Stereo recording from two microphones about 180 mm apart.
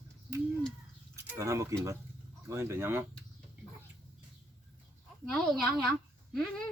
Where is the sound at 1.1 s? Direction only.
15° right (ahead or behind).